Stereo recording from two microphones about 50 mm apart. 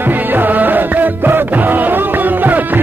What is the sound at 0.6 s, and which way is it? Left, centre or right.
Music, right.